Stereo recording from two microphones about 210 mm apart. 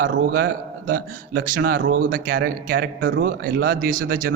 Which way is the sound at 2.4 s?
55° right (ahead or behind).